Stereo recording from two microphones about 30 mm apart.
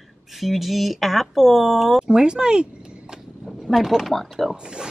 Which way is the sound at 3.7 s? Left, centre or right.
Centre.